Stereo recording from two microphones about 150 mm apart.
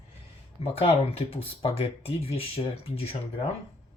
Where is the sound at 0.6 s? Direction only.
40° left (ahead or behind).